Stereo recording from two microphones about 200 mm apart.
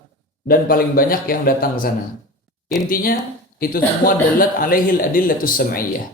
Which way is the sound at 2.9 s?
45° left (ahead or behind).